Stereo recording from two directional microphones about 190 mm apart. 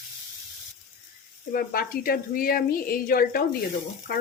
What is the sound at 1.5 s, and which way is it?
A woman's voice, 50° left (ahead or behind).